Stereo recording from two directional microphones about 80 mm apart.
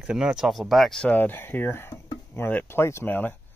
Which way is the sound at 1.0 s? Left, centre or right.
Left.